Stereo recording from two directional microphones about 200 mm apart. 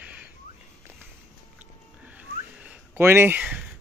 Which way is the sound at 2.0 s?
5° right (ahead or behind).